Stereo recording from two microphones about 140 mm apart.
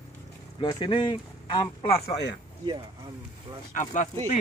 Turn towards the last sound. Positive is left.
turn(degrees=60)  # may be behind; listen again after turning